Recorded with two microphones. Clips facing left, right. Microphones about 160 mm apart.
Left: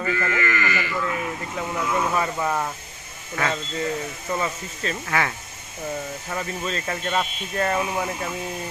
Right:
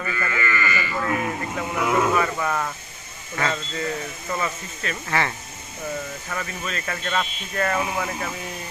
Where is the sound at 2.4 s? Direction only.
15° left (ahead or behind).